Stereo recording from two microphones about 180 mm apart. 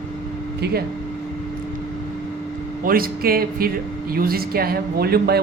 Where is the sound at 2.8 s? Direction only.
55° right (ahead or behind).